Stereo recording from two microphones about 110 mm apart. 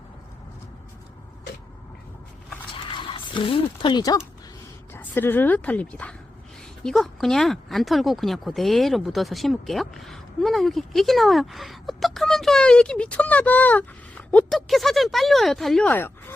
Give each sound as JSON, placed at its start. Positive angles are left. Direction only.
{"t": 2.7, "sound": "a sound", "side_deg": 50}
{"t": 4.9, "sound": "speech", "side_deg": 20}
{"t": 14.5, "sound": "speech", "side_deg": 0}
{"t": 15.9, "sound": "speech", "side_deg": 20}